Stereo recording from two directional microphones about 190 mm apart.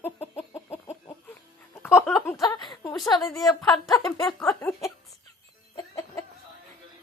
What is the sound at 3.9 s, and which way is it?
Speech, 20° left (ahead or behind).